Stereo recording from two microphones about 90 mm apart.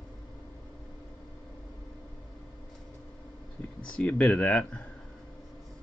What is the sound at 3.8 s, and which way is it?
Speech, 15° left (ahead or behind).